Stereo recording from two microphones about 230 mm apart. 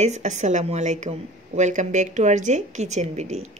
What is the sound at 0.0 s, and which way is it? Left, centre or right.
A woman's voice, right.